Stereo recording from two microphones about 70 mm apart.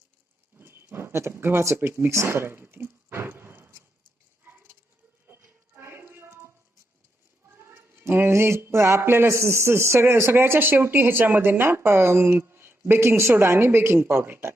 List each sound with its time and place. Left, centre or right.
0.6 s speech: right
2.0 s a sound: right
7.7 s speech: right